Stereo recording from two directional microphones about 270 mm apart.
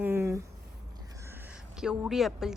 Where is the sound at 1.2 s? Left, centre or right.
Centre.